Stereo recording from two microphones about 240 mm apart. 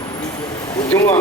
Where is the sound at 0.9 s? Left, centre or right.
Centre.